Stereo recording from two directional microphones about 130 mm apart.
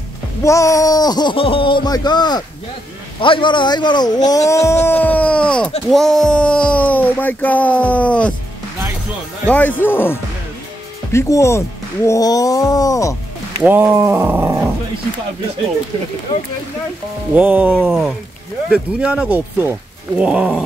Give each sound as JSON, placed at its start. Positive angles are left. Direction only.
{"t": 0.4, "sound": "speech", "side_deg": 25}
{"t": 9.5, "sound": "speech", "side_deg": 15}
{"t": 13.6, "sound": "speech", "side_deg": -15}
{"t": 17.4, "sound": "speech", "side_deg": -10}